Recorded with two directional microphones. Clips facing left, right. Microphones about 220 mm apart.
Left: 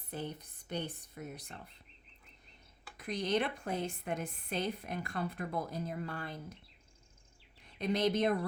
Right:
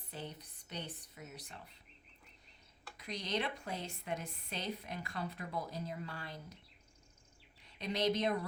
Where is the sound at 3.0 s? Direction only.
50° left (ahead or behind).